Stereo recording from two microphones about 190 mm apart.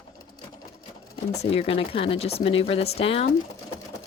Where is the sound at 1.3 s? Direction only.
35° left (ahead or behind).